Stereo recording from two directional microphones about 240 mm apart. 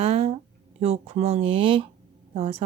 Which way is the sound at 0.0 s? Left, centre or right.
Right.